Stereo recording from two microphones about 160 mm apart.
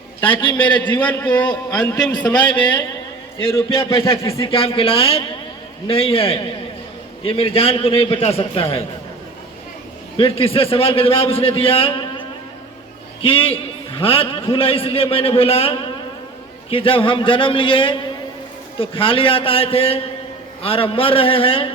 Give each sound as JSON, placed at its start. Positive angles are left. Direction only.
{"t": 0.9, "sound": "a man's voice", "side_deg": 10}
{"t": 1.3, "sound": "a man's voice", "side_deg": 25}
{"t": 1.8, "sound": "a man's voice", "side_deg": 10}
{"t": 2.3, "sound": "a man's voice", "side_deg": 30}
{"t": 10.2, "sound": "a man's voice", "side_deg": 35}
{"t": 13.2, "sound": "a man's voice", "side_deg": 35}